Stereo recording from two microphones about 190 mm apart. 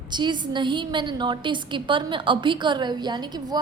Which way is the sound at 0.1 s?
25° right (ahead or behind).